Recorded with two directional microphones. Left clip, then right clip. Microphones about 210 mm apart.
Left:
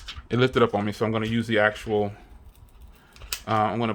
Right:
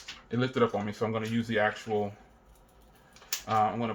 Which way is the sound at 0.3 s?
55° left (ahead or behind).